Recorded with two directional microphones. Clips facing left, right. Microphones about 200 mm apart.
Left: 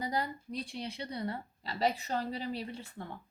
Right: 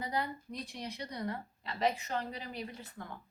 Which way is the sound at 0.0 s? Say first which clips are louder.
Left 1 dB; 35° left (ahead or behind).